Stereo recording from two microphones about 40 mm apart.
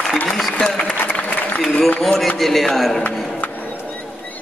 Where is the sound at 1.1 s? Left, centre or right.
Left.